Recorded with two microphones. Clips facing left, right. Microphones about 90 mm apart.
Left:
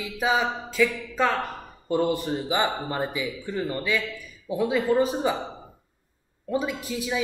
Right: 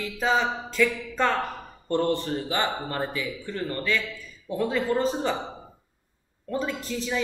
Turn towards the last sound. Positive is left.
turn(degrees=10)  # may be behind; listen again after turning